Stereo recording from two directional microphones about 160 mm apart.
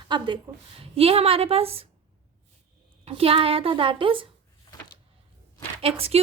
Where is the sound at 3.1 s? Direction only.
35° right (ahead or behind).